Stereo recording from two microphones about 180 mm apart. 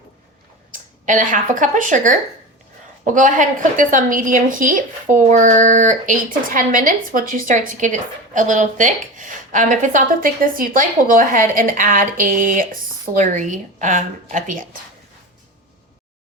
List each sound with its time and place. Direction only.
0.7 s a woman's voice: 45° right (ahead or behind)